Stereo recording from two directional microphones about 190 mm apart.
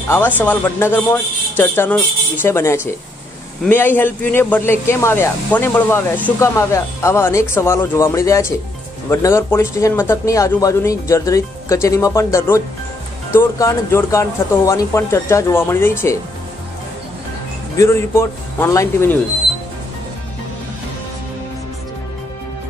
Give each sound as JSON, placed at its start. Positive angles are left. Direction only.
{"t": 0.1, "sound": "speech", "side_deg": 10}
{"t": 17.7, "sound": "speech", "side_deg": 15}